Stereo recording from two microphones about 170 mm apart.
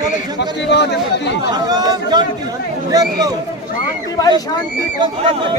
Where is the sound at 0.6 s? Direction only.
90° left.